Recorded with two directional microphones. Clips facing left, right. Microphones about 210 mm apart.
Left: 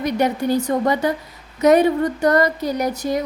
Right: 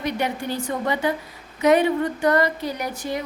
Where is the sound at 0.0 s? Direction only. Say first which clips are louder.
Left 6 dB; 40° left (ahead or behind).